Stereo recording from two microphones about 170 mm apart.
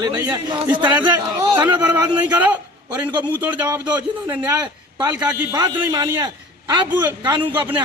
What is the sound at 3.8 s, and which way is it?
Speech, 10° right (ahead or behind).